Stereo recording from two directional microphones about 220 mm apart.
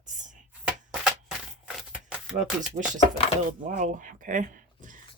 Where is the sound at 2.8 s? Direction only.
30° right (ahead or behind).